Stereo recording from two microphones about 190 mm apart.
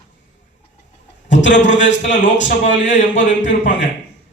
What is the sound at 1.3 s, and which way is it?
A man's voice, 70° left (ahead or behind).